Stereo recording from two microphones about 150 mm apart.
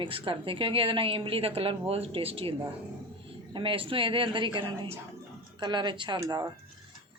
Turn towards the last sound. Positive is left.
turn(degrees=-25)  # may be behind; listen again after turning